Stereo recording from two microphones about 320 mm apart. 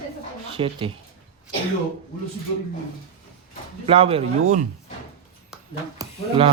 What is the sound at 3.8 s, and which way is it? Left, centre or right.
Speech, centre.